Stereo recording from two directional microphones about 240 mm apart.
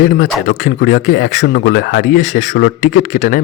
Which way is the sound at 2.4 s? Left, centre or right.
Left.